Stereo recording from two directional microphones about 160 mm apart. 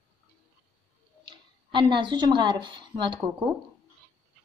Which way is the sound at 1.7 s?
30° right (ahead or behind).